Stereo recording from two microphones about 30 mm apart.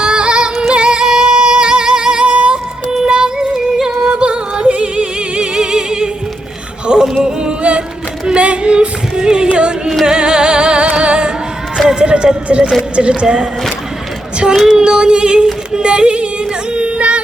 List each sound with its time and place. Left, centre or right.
0.0 s music: right
5.5 s music: right
8.4 s singing: right
9.6 s music: right
12.5 s a sound: right
13.0 s speech: right
13.2 s female singing: right
14.7 s female singing: right
15.7 s music: right